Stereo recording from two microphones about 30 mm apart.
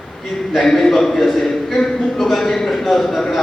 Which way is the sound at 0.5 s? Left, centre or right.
Centre.